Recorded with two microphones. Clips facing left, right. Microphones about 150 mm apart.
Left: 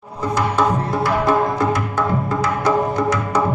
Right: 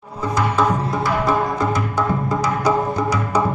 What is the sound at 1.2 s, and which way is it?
Music, centre (ahead or behind).